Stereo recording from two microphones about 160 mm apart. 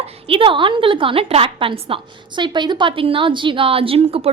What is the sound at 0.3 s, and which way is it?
A woman's voice, 35° right (ahead or behind).